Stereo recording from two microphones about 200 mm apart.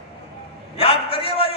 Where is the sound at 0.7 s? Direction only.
30° left (ahead or behind).